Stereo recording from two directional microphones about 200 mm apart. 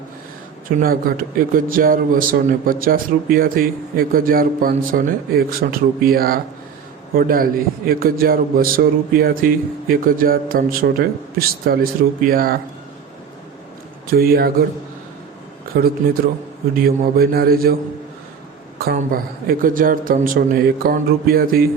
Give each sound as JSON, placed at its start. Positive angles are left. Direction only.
{"t": 0.8, "sound": "a man's voice", "side_deg": -45}
{"t": 14.1, "sound": "a man's voice", "side_deg": -50}
{"t": 16.7, "sound": "a man's voice", "side_deg": -50}
{"t": 18.8, "sound": "a man's voice", "side_deg": -50}